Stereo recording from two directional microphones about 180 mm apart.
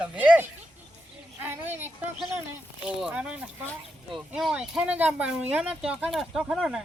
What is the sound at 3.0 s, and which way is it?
Speech, 5° right (ahead or behind).